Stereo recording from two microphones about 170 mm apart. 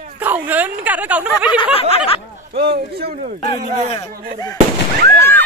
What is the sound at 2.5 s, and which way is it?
Speech, 70° right (ahead or behind).